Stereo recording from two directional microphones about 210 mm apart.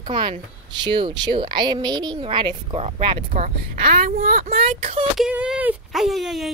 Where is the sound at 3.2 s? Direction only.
40° right (ahead or behind).